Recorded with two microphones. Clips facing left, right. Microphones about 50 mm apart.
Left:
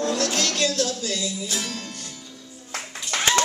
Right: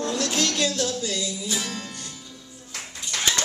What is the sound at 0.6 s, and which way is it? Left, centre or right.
Music, right.